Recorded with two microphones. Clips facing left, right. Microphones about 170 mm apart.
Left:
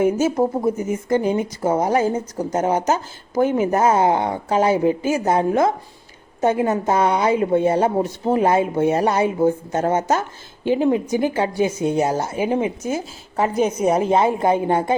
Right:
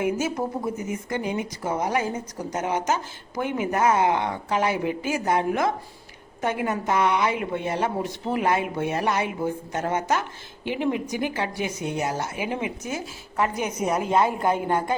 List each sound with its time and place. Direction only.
0.0 s a woman's voice: 30° left (ahead or behind)